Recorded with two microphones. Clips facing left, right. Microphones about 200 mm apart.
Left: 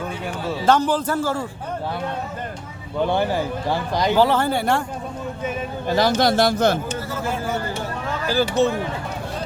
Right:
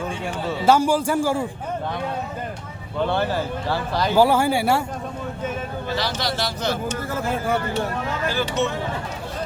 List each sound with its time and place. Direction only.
0.6 s a man's voice: 10° right (ahead or behind)
3.1 s speech: 15° left (ahead or behind)
4.1 s a man's voice: 10° right (ahead or behind)
5.9 s a man's voice: 45° left (ahead or behind)
8.3 s speech: 35° left (ahead or behind)